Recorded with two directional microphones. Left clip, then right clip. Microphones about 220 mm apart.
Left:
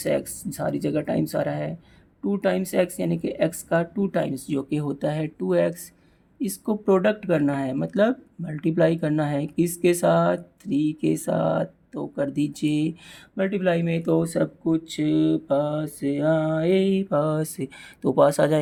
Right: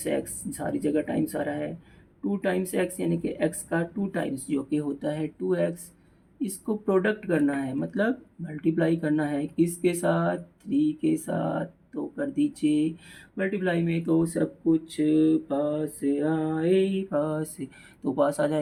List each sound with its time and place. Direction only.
0.0 s speech: 55° left (ahead or behind)